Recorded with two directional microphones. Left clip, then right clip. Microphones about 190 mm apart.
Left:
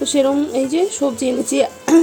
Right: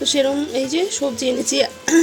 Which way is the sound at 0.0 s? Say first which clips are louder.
Left 2 dB; 10° left (ahead or behind).